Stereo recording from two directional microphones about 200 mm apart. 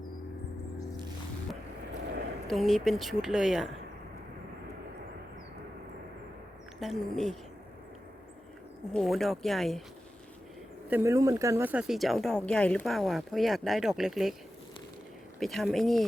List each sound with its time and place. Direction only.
2.5 s speech: centre (ahead or behind)
6.7 s speech: centre (ahead or behind)
8.9 s speech: centre (ahead or behind)
10.8 s speech: 10° right (ahead or behind)
15.4 s speech: centre (ahead or behind)